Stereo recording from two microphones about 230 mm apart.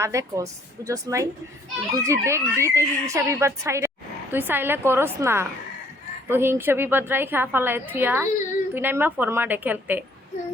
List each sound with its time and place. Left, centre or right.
0.0 s a woman's voice: centre